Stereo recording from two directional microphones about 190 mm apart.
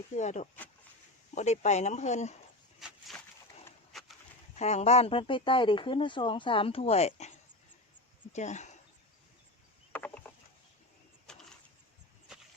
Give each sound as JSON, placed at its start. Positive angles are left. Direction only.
{"t": 0.2, "sound": "speech", "side_deg": 40}
{"t": 2.8, "sound": "a sound", "side_deg": 0}
{"t": 4.5, "sound": "speech", "side_deg": 35}
{"t": 9.9, "sound": "rowboat", "side_deg": 10}